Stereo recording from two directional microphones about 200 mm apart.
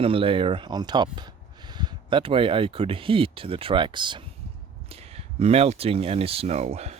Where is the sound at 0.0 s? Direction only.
25° right (ahead or behind).